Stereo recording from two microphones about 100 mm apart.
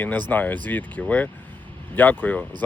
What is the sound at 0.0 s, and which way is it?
Speech, 20° left (ahead or behind).